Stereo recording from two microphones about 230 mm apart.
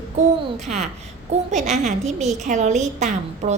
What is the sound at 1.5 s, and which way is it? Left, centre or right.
A woman's voice, right.